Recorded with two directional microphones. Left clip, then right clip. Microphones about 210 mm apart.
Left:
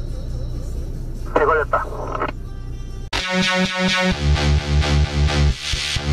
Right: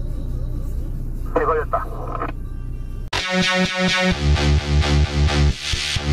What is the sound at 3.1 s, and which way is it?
Music, centre (ahead or behind).